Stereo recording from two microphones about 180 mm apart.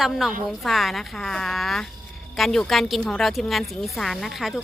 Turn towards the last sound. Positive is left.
turn(degrees=0)  # may be behind; listen again after turning